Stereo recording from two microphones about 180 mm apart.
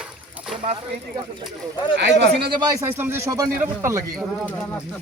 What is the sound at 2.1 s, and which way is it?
Speech, 75° right (ahead or behind).